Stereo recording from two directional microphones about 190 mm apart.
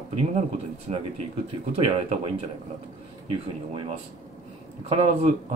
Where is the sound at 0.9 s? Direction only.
30° right (ahead or behind).